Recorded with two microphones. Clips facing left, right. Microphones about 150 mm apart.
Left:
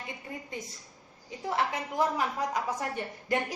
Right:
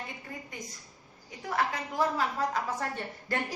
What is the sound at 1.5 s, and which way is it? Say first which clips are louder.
A woman's voice: left 1 dB; 25° left (ahead or behind).